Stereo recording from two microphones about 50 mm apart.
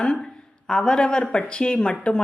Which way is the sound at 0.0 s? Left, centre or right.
Centre.